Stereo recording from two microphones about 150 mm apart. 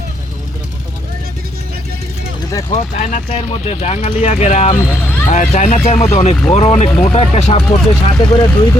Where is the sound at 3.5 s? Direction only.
40° left (ahead or behind).